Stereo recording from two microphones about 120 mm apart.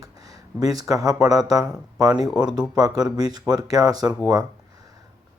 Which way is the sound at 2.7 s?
30° right (ahead or behind).